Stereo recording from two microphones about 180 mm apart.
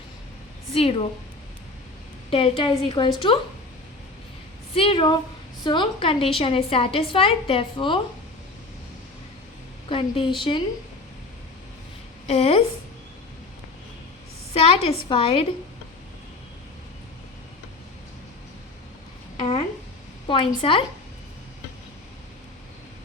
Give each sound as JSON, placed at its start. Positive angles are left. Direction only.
{"t": 0.7, "sound": "a woman's voice", "side_deg": 30}
{"t": 2.3, "sound": "a woman's voice", "side_deg": 30}
{"t": 4.7, "sound": "a woman's voice", "side_deg": 30}
{"t": 9.9, "sound": "a woman's voice", "side_deg": 25}
{"t": 12.3, "sound": "a woman's voice", "side_deg": 35}
{"t": 14.5, "sound": "a woman's voice", "side_deg": 35}
{"t": 19.4, "sound": "a woman's voice", "side_deg": 25}